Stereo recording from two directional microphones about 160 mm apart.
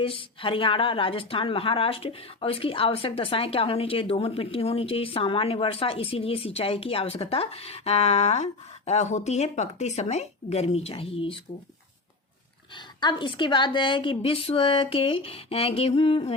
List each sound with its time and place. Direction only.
0.0 s speech: 35° left (ahead or behind)
13.0 s speech: 30° left (ahead or behind)